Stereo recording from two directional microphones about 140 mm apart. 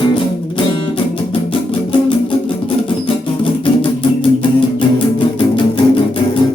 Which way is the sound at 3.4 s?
40° left (ahead or behind).